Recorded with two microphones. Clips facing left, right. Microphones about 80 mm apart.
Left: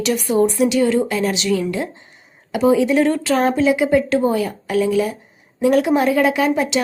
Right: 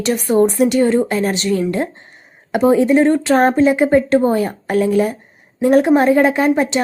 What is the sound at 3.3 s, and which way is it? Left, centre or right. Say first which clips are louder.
A woman's voice: right 3 dB; right.